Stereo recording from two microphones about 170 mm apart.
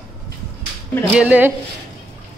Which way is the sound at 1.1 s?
10° right (ahead or behind).